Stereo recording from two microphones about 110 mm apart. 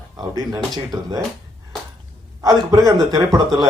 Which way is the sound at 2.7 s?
30° right (ahead or behind).